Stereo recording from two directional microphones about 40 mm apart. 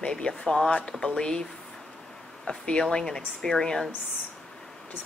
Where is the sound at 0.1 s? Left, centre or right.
Centre.